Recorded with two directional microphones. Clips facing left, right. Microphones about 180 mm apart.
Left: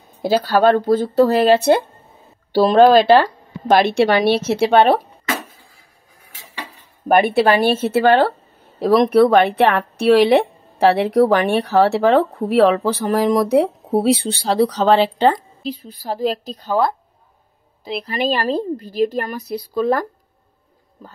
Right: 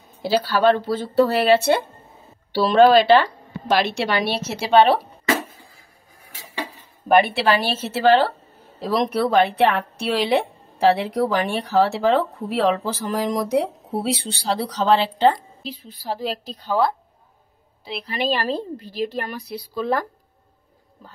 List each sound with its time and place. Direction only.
0.2 s a woman's voice: 50° left (ahead or behind)
7.1 s a woman's voice: 50° left (ahead or behind)